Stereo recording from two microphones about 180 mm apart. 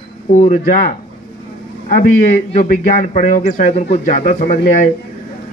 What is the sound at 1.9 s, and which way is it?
A man's voice, 45° left (ahead or behind).